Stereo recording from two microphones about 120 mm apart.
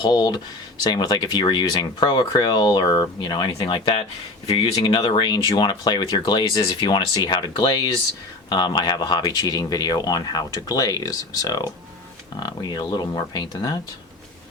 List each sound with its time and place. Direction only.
0.0 s speech: 35° left (ahead or behind)